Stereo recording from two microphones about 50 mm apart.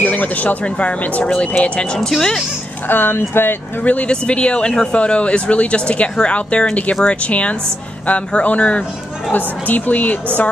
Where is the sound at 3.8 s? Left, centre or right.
Left.